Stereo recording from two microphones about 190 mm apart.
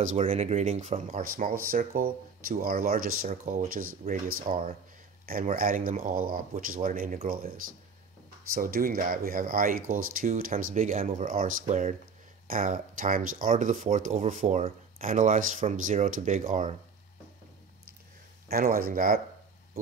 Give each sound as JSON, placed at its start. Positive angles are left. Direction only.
{"t": 0.0, "sound": "speech", "side_deg": -40}
{"t": 18.5, "sound": "speech", "side_deg": -50}